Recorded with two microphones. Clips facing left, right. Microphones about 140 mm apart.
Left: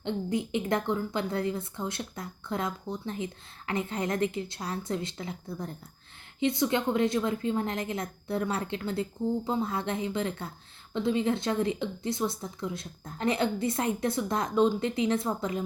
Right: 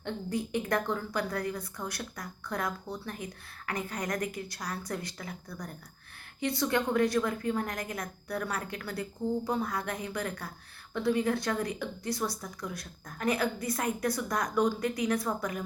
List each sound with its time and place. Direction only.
0.0 s a woman's voice: 20° left (ahead or behind)